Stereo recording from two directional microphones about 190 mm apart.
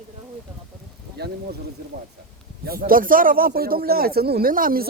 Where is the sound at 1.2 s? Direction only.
55° right (ahead or behind).